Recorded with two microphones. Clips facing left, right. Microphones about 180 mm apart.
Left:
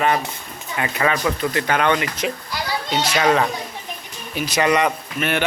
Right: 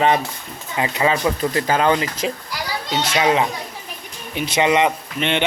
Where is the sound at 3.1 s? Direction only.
15° right (ahead or behind).